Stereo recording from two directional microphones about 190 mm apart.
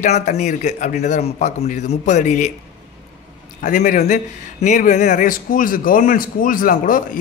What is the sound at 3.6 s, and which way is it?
A man's voice, 45° left (ahead or behind).